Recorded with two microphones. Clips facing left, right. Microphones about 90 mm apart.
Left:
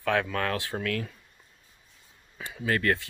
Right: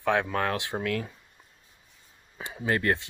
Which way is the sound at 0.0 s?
20° right (ahead or behind).